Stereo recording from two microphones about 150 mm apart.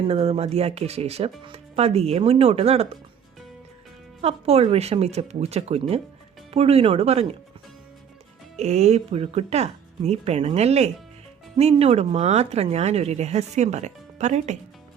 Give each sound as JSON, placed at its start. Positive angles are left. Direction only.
{"t": 0.0, "sound": "a woman's voice", "side_deg": -40}
{"t": 4.2, "sound": "a woman's voice", "side_deg": -45}
{"t": 8.5, "sound": "a woman's voice", "side_deg": -50}